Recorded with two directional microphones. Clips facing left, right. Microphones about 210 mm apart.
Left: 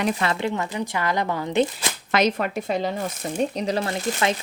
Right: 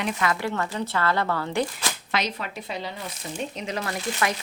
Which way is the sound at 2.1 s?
50° left (ahead or behind).